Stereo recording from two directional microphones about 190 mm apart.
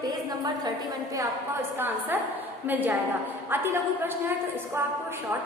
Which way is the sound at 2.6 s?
10° right (ahead or behind).